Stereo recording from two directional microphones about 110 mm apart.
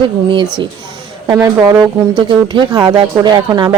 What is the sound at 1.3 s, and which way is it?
Speech, 35° right (ahead or behind).